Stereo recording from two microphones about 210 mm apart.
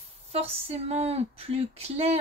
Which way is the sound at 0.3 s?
30° right (ahead or behind).